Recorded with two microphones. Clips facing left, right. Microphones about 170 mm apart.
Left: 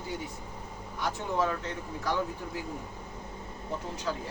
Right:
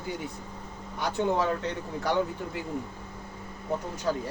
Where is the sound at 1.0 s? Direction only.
70° right (ahead or behind).